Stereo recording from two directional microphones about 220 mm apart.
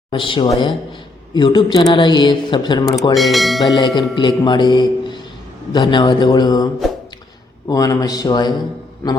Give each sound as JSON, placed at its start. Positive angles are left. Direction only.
{"t": 0.1, "sound": "speech", "side_deg": 20}
{"t": 3.2, "sound": "speech", "side_deg": 0}
{"t": 3.8, "sound": "speech", "side_deg": 15}
{"t": 7.7, "sound": "speech", "side_deg": 15}